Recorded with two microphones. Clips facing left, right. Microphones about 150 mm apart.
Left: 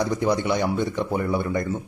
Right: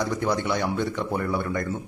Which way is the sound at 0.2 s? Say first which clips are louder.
Left 3 dB; 15° left (ahead or behind).